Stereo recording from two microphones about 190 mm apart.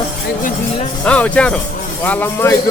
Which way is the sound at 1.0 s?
5° left (ahead or behind).